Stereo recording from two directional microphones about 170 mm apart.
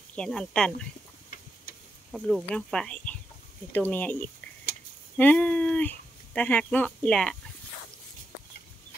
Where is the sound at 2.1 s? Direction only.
5° left (ahead or behind).